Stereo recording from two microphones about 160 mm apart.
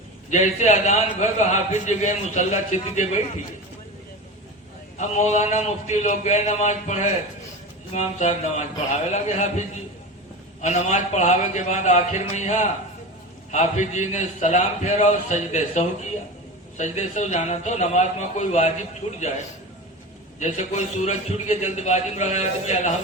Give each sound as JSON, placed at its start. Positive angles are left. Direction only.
{"t": 0.3, "sound": "a man's voice", "side_deg": 45}
{"t": 4.9, "sound": "a man's voice", "side_deg": 45}
{"t": 20.4, "sound": "a man's voice", "side_deg": 45}